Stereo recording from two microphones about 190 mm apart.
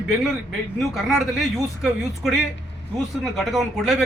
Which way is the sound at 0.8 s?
Centre (ahead or behind).